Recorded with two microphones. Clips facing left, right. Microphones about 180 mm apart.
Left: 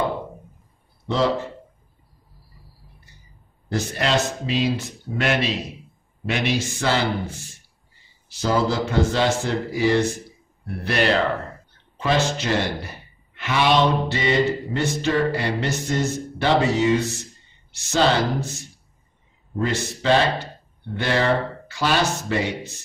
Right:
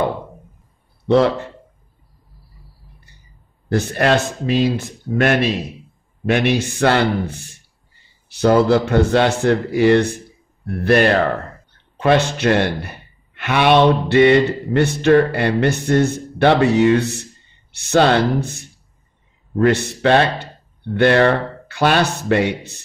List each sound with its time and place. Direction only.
1.0 s speech: 60° right (ahead or behind)
3.6 s speech: 60° right (ahead or behind)